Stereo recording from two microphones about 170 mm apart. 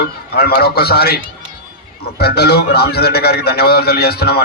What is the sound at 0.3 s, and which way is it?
A man's voice, 65° left (ahead or behind).